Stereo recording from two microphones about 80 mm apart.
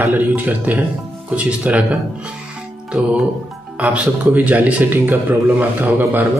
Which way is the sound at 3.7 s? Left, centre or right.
Centre.